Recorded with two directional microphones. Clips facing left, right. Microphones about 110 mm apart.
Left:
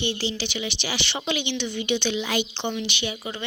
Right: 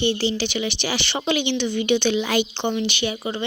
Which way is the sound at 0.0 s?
45° right (ahead or behind).